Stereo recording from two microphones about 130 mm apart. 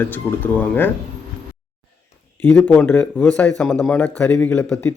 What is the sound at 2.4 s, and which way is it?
A man's voice, 10° left (ahead or behind).